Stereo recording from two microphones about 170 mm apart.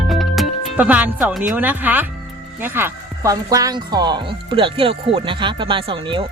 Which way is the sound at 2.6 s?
10° right (ahead or behind).